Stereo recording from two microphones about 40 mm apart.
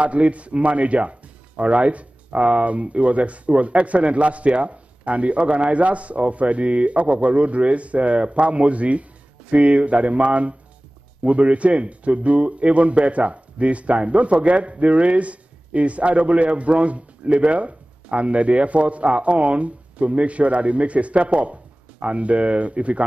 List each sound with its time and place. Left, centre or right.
0.0 s a man's voice: right